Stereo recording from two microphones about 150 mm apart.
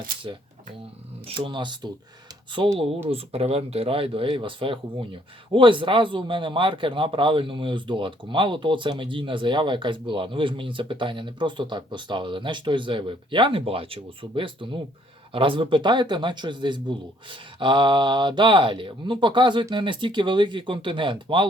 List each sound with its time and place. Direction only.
0.3 s a man's voice: 30° right (ahead or behind)